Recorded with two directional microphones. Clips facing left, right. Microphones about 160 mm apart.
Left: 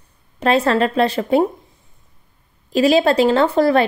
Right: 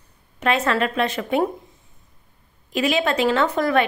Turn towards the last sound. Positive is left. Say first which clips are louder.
# left 5 dB
turn(degrees=30)  # may be behind; listen again after turning